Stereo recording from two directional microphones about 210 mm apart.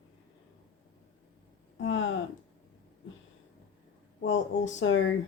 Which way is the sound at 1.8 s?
65° left (ahead or behind).